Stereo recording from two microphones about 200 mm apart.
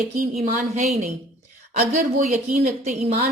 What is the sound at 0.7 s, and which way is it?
A woman's voice, 35° right (ahead or behind).